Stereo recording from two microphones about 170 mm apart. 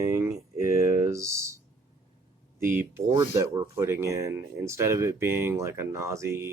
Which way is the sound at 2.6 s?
15° right (ahead or behind).